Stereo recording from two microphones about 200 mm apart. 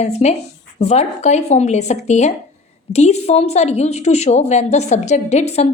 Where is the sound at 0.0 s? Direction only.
35° left (ahead or behind).